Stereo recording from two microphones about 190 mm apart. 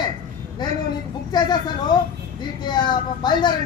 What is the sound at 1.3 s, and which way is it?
Speech, 20° left (ahead or behind).